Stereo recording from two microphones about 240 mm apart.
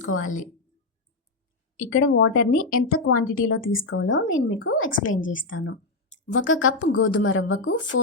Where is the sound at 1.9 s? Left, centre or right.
Left.